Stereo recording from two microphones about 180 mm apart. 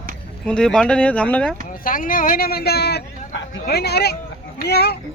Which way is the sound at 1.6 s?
50° left (ahead or behind).